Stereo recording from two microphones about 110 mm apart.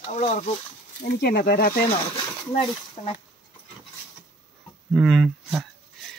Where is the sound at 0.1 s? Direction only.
90° left.